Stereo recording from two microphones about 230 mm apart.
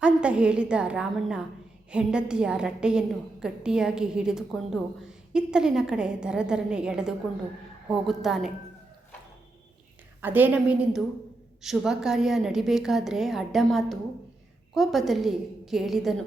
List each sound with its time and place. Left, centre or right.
0.0 s a woman's voice: centre
10.2 s a woman's voice: centre